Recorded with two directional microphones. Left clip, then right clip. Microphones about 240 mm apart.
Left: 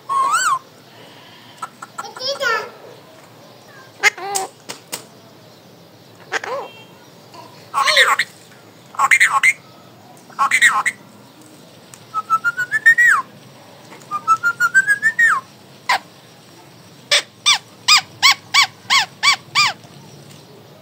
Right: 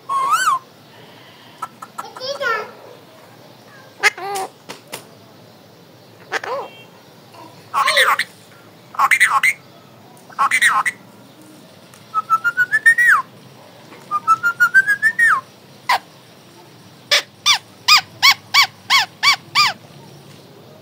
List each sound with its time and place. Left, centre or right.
0.1 s owl: centre
1.6 s chicken: centre
2.1 s children playing: left
4.0 s duck: centre
4.7 s typewriter: left
6.3 s vehicle: centre
7.7 s a sound: centre
8.9 s telephone: centre
10.3 s speech: centre
12.3 s whistling: centre
15.9 s dog: centre
17.1 s a sound: centre